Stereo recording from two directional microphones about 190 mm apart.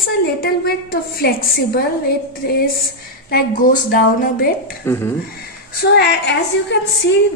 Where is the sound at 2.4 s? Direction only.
55° left (ahead or behind).